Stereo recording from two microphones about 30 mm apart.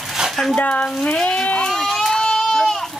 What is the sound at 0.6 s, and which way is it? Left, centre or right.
Speech, left.